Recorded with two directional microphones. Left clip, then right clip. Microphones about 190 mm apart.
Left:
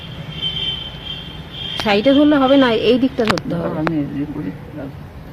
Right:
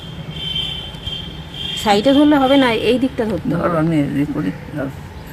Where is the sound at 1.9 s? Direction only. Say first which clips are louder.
Right 1 dB; 15° left (ahead or behind); by 3.2 s 35° left (ahead or behind).